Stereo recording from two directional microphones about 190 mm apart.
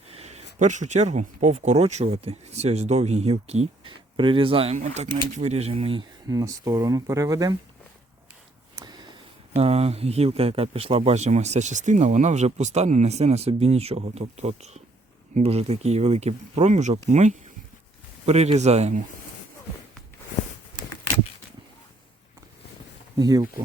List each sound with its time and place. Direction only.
0.1 s a man's voice: 35° right (ahead or behind); by 7.5 s 20° right (ahead or behind)
8.7 s a sound: 20° right (ahead or behind)
9.6 s a man's voice: 30° right (ahead or behind)
23.1 s speech: 20° right (ahead or behind)